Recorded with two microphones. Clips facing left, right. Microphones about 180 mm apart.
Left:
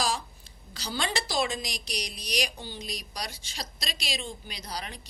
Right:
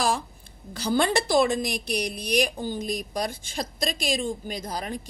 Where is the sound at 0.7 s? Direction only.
55° right (ahead or behind).